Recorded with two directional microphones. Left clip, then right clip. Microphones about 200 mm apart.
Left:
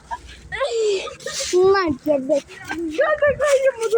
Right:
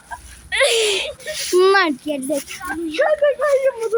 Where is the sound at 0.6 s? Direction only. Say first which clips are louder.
Right 4 dB; 35° right (ahead or behind).